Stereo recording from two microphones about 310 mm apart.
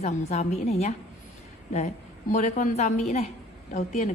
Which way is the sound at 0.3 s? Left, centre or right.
Left.